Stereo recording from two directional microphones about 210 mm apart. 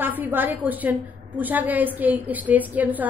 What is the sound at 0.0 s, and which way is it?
A woman's voice, 10° right (ahead or behind).